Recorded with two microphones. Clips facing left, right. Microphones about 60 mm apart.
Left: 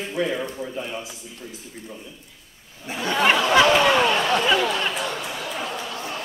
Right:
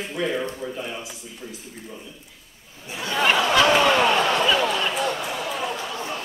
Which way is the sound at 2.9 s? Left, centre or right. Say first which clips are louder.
Left 3 dB; left.